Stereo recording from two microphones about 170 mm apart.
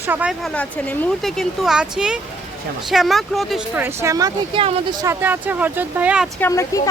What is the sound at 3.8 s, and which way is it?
Speech, 15° right (ahead or behind).